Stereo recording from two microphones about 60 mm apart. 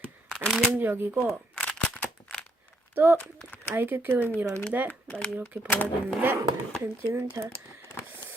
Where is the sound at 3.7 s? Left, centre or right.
Right.